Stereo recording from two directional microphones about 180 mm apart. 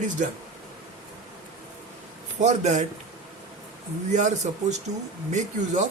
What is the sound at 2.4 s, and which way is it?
Speech, 40° right (ahead or behind).